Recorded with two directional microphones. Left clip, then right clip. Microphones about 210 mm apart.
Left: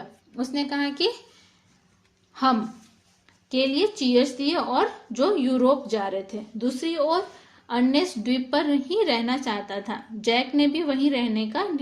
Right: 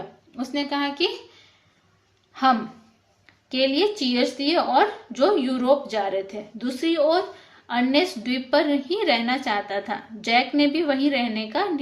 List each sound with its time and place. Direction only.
0.3 s a woman's voice: 45° left (ahead or behind)
2.3 s a woman's voice: 40° left (ahead or behind)